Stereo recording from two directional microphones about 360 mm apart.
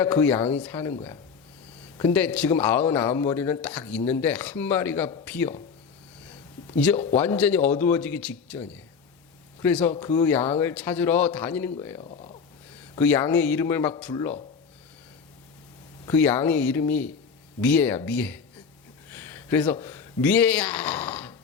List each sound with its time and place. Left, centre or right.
0.0 s a man's voice: centre
2.0 s a man's voice: centre
6.7 s a man's voice: centre
13.0 s a man's voice: centre
16.0 s a man's voice: centre